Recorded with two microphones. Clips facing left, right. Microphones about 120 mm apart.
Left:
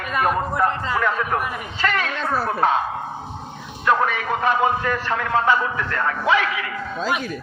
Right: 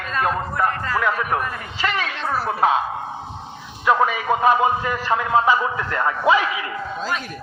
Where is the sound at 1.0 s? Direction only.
10° right (ahead or behind).